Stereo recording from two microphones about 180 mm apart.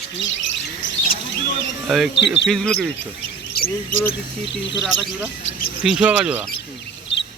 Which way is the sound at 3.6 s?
60° left (ahead or behind).